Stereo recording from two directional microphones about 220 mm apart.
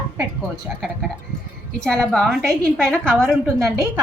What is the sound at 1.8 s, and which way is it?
Speech, 5° left (ahead or behind).